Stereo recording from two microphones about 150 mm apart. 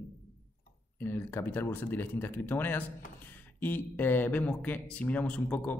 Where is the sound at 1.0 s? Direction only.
15° left (ahead or behind).